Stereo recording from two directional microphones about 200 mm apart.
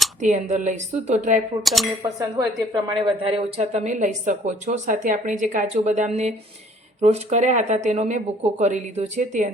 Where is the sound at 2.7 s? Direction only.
25° right (ahead or behind).